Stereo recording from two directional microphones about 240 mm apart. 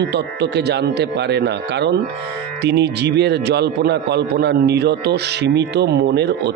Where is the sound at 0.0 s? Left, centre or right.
Right.